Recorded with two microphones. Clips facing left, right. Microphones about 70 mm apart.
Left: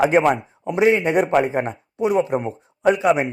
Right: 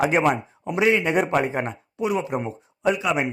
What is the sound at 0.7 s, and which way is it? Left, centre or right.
A man's voice, left.